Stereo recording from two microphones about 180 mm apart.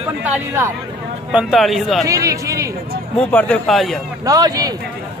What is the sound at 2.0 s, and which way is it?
Speech, 20° right (ahead or behind).